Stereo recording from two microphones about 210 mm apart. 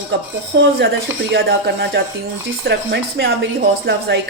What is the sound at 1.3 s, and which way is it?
A woman's voice, 50° right (ahead or behind).